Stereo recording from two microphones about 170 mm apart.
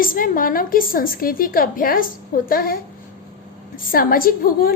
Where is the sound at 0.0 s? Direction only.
55° left (ahead or behind).